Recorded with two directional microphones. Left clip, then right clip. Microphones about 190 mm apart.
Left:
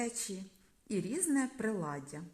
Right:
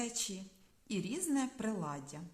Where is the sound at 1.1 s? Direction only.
15° left (ahead or behind).